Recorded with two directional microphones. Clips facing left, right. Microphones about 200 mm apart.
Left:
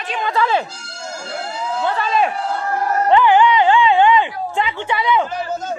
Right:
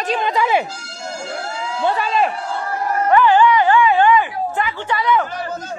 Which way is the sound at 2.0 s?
Centre (ahead or behind).